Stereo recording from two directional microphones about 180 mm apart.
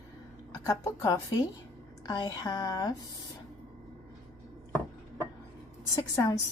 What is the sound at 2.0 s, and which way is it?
Speech, 25° left (ahead or behind).